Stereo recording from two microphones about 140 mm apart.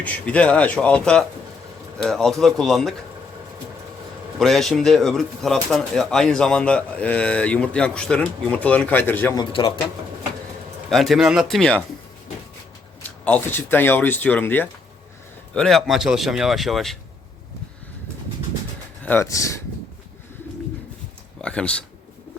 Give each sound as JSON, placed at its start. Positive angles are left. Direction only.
{"t": 0.0, "sound": "speech", "side_deg": 10}
{"t": 4.4, "sound": "speech", "side_deg": 0}
{"t": 9.3, "sound": "a man's voice", "side_deg": 35}
{"t": 10.8, "sound": "speech", "side_deg": 0}
{"t": 13.0, "sound": "speech", "side_deg": 10}
{"t": 15.5, "sound": "speech", "side_deg": 5}
{"t": 19.0, "sound": "speech", "side_deg": 15}
{"t": 21.4, "sound": "speech", "side_deg": 5}